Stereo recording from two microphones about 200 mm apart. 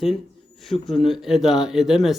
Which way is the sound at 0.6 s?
Centre (ahead or behind).